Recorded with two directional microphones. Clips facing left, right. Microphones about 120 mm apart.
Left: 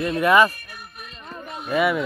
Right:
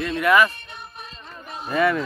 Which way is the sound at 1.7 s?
10° left (ahead or behind).